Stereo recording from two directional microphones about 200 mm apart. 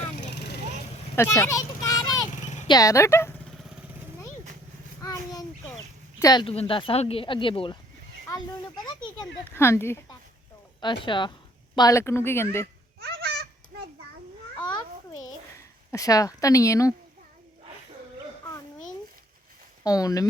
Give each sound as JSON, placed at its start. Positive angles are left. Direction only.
{"t": 1.1, "sound": "a sound", "side_deg": 15}
{"t": 2.6, "sound": "speech", "side_deg": 20}
{"t": 3.6, "sound": "vehicle", "side_deg": -5}
{"t": 5.0, "sound": "a sound", "side_deg": 20}
{"t": 6.1, "sound": "speech", "side_deg": 20}
{"t": 10.8, "sound": "speech", "side_deg": 25}
{"t": 13.0, "sound": "a sound", "side_deg": -55}
{"t": 15.9, "sound": "speech", "side_deg": 15}
{"t": 19.8, "sound": "speech", "side_deg": 20}